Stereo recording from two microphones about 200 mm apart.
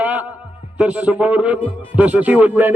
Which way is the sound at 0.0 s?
5° right (ahead or behind).